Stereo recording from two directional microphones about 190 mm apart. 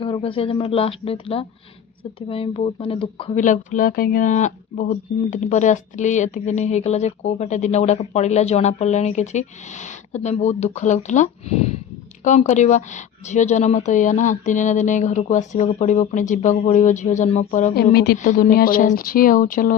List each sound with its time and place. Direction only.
0.0 s speech: 30° left (ahead or behind)
3.3 s speech: 40° left (ahead or behind)
17.9 s speech: 60° left (ahead or behind)
18.2 s speech: 40° left (ahead or behind)